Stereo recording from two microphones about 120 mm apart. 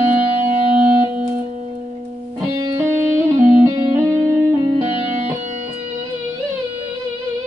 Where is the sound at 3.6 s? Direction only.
30° right (ahead or behind).